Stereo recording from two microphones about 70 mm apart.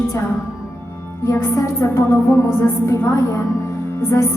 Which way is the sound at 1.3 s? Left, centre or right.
Left.